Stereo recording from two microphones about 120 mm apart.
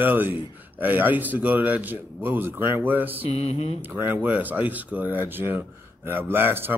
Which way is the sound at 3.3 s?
60° left (ahead or behind).